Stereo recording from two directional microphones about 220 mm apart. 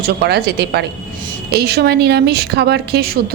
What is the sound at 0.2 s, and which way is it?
A woman's voice, 45° right (ahead or behind).